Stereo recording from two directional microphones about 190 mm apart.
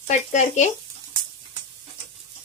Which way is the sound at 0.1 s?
40° left (ahead or behind).